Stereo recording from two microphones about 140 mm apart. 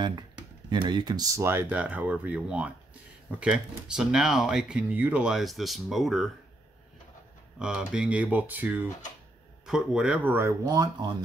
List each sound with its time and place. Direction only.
0.0 s speech: 30° right (ahead or behind); by 6.3 s centre (ahead or behind)
7.5 s speech: 5° right (ahead or behind); by 11.2 s 30° right (ahead or behind)